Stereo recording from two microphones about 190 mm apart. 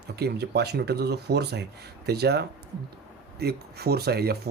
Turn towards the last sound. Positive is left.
turn(degrees=-55)  # may be behind; listen again after turning